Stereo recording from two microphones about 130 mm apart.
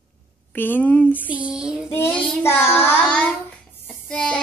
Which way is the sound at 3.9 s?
5° left (ahead or behind).